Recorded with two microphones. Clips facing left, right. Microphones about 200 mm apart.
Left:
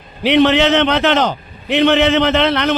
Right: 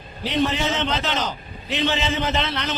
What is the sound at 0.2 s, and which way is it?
A man's voice, 75° left (ahead or behind).